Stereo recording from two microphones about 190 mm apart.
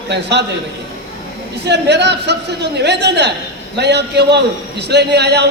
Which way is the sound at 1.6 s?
65° right (ahead or behind).